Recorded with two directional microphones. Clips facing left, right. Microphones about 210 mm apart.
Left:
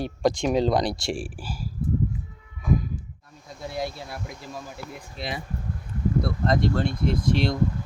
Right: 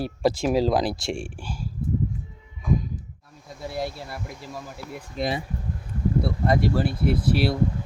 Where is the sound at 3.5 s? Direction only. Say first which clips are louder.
Right 1 dB; centre (ahead or behind).